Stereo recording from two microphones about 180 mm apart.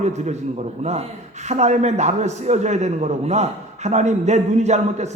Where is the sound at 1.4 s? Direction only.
40° right (ahead or behind).